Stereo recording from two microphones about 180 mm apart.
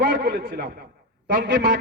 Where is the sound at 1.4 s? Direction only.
75° right (ahead or behind).